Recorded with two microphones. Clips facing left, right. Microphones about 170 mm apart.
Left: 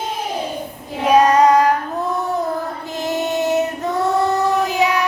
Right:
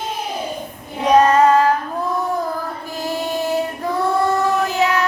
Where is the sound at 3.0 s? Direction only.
20° left (ahead or behind).